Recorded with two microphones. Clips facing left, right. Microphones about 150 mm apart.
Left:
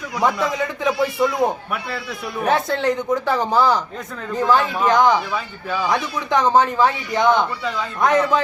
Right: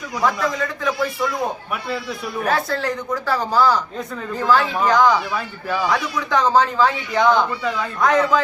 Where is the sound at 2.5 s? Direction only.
20° left (ahead or behind).